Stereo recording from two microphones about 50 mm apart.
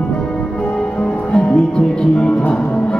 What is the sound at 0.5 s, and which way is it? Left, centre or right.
Music, left.